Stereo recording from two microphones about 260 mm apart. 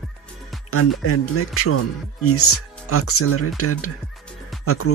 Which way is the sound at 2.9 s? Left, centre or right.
Left.